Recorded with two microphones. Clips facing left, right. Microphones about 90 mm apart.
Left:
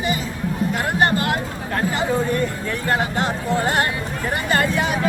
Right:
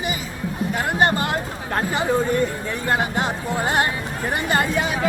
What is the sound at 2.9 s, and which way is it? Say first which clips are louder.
Speech: even; 20° right (ahead or behind).